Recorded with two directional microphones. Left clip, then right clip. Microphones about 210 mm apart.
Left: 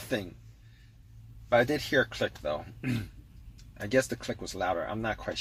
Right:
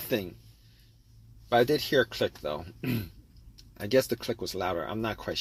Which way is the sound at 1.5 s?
35° right (ahead or behind).